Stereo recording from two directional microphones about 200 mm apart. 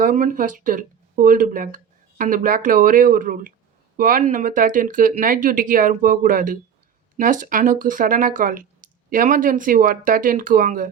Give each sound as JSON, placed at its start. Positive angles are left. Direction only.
{"t": 0.0, "sound": "speech", "side_deg": -40}